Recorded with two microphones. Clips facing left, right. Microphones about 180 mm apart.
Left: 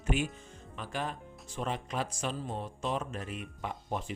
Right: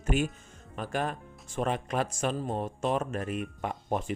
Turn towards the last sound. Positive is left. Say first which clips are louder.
# right 5 dB
turn(degrees=-55)  # may be behind; listen again after turning